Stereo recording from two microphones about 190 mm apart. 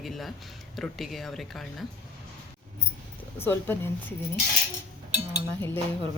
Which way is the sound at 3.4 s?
10° left (ahead or behind).